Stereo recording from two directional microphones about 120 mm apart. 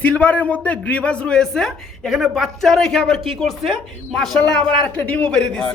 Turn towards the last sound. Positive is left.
turn(degrees=5)  # may be behind; listen again after turning